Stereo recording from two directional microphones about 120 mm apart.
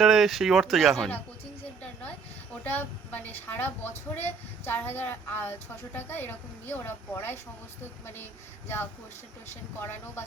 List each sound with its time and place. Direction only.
0.0 s a woman's voice: 5° right (ahead or behind); by 10.2 s 20° left (ahead or behind)